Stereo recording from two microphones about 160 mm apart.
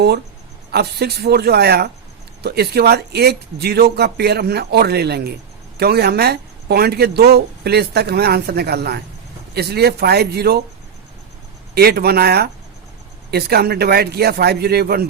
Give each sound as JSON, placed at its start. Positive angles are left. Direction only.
{"t": 0.7, "sound": "speech", "side_deg": -85}
{"t": 11.7, "sound": "speech", "side_deg": -80}